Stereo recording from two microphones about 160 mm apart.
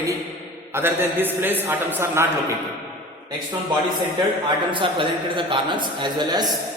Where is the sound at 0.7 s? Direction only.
15° right (ahead or behind).